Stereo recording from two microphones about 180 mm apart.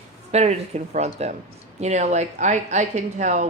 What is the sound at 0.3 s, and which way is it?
A woman's voice, 35° right (ahead or behind).